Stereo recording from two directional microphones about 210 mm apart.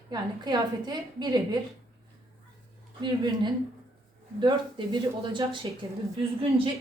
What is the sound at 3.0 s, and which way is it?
Speech, 20° right (ahead or behind).